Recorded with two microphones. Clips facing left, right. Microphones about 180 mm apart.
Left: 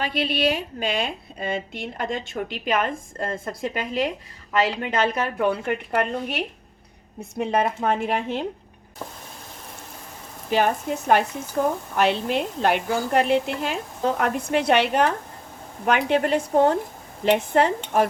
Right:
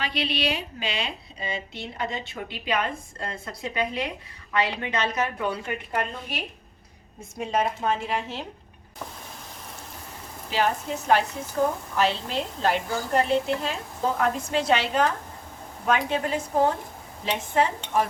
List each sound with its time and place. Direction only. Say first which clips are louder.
0.0 s a woman's voice: left 5 dB; 50° left (ahead or behind)
10.5 s a woman's voice: left 4 dB; 55° left (ahead or behind)